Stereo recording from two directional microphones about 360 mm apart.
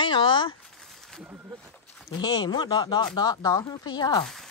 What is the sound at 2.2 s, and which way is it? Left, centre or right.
Speech, centre.